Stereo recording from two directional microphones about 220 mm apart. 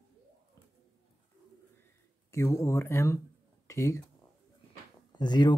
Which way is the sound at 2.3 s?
15° left (ahead or behind).